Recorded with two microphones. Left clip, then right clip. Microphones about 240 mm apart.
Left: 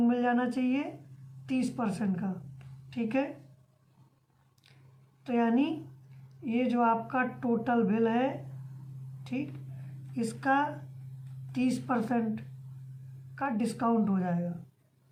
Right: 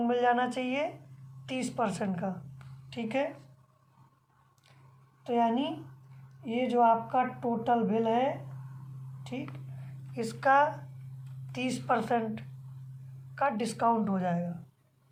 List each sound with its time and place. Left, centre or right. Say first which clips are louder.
0.0 s speech: right 2 dB; right
5.2 s speech: right 1 dB; right
10.2 s speech: right 4 dB; right